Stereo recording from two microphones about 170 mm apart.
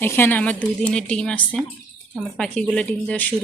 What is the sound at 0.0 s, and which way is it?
Speech, 10° left (ahead or behind).